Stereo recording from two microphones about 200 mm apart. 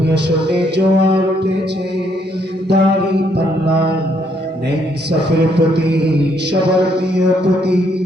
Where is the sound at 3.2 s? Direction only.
55° right (ahead or behind).